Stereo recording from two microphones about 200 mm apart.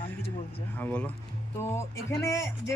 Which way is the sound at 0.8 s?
10° left (ahead or behind).